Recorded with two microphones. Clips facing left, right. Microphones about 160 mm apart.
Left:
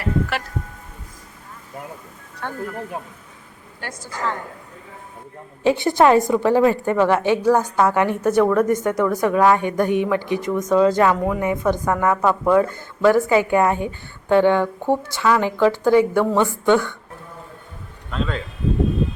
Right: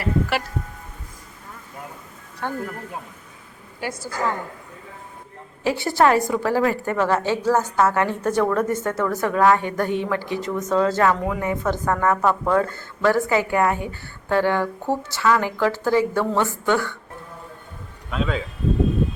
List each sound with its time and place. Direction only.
0.0 s speech: 5° right (ahead or behind)
2.4 s speech: 5° right (ahead or behind)
3.8 s a woman's voice: 10° right (ahead or behind)
5.6 s speech: 20° left (ahead or behind)
18.1 s speech: 5° right (ahead or behind)